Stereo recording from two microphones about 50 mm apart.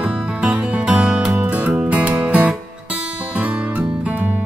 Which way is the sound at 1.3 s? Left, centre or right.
Right.